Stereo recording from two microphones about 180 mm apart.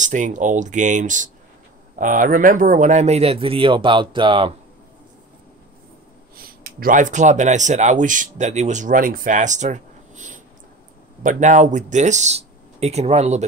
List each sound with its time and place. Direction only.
0.0 s speech: 45° right (ahead or behind); by 4.6 s 30° right (ahead or behind)
6.3 s speech: 55° right (ahead or behind); by 13.4 s 35° right (ahead or behind)